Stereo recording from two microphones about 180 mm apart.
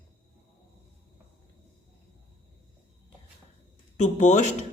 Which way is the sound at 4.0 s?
40° left (ahead or behind).